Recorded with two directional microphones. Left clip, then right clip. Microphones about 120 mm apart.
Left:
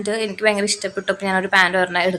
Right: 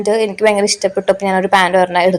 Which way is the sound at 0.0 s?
25° right (ahead or behind).